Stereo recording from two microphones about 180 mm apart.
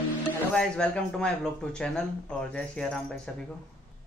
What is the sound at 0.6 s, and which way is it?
Speech, 5° left (ahead or behind).